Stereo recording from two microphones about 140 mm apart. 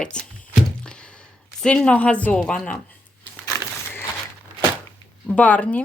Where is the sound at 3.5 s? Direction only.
20° left (ahead or behind).